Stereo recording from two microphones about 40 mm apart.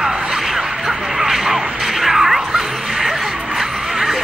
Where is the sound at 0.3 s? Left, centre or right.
Centre.